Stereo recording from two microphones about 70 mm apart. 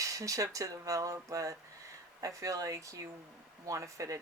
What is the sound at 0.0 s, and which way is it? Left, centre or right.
Speech, right.